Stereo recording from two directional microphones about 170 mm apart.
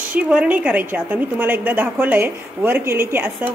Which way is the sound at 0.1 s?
5° right (ahead or behind).